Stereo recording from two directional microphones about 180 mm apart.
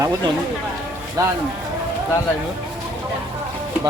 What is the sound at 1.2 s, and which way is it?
Speech, 15° right (ahead or behind).